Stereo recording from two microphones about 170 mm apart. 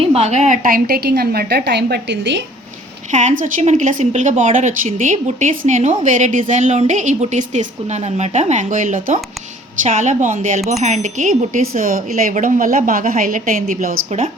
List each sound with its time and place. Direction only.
0.0 s a woman's voice: 40° right (ahead or behind); by 2.4 s 85° right
3.1 s a woman's voice: 45° right (ahead or behind)